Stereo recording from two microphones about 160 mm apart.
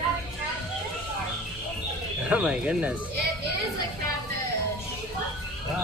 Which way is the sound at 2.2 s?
5° right (ahead or behind).